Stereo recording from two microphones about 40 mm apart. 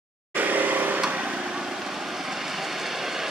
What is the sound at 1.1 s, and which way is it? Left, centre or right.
Vehicle, right.